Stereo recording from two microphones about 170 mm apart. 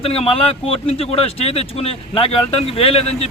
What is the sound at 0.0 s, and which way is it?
Speech, 35° left (ahead or behind).